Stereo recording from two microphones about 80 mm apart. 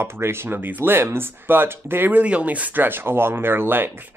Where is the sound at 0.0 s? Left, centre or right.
Right.